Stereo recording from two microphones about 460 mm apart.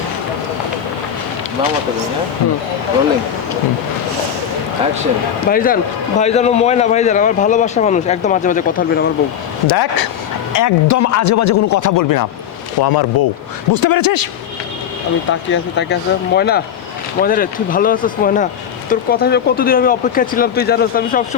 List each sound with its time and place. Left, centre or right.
5.5 s speech: centre
9.6 s a man's voice: left
10.5 s a man's voice: left
15.3 s speech: left